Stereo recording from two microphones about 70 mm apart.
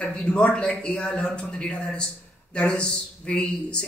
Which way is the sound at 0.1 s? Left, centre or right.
Centre.